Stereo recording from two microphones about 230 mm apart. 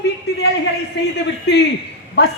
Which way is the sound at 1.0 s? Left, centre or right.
Left.